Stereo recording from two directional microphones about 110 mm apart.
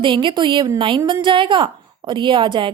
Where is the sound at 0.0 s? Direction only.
45° right (ahead or behind).